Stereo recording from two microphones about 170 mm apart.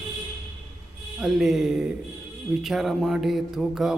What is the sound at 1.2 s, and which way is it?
Mantra, centre (ahead or behind).